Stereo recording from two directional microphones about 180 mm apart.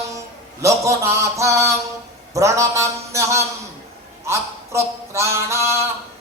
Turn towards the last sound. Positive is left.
turn(degrees=-15)  # may be behind; listen again after turning